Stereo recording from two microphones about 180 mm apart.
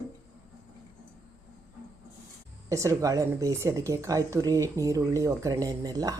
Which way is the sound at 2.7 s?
15° right (ahead or behind).